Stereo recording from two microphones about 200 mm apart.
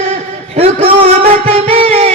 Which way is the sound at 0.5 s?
30° right (ahead or behind).